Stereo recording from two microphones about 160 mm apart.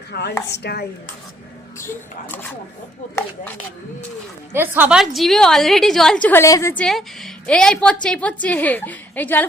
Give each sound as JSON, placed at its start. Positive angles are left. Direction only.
{"t": 0.1, "sound": "a woman's voice", "side_deg": 90}
{"t": 1.8, "sound": "a woman's voice", "side_deg": 15}
{"t": 4.5, "sound": "a woman's voice", "side_deg": -15}
{"t": 6.8, "sound": "a woman's voice", "side_deg": 0}